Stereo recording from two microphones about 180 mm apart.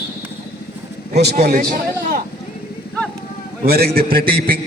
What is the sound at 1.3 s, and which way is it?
Speech, 50° right (ahead or behind).